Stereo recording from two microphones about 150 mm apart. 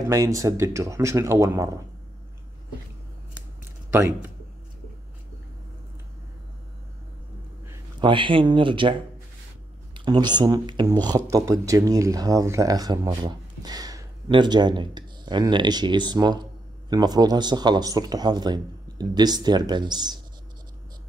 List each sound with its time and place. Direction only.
0.1 s speech: 20° right (ahead or behind)
3.9 s speech: 15° right (ahead or behind)
8.0 s speech: 30° right (ahead or behind)
9.9 s speech: 30° right (ahead or behind)